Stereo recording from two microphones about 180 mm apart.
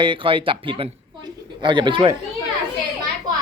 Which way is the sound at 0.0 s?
30° right (ahead or behind).